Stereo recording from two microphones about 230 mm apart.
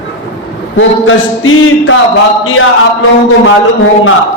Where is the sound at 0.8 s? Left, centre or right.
Left.